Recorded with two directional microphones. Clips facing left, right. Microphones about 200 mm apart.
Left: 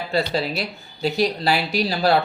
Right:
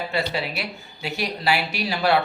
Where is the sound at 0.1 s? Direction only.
35° left (ahead or behind).